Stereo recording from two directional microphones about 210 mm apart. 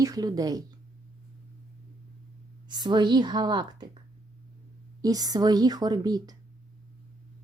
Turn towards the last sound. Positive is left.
turn(degrees=-20)  # may be behind; listen again after turning